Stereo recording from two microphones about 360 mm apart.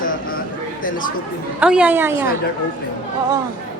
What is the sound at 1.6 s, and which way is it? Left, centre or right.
Speech, centre.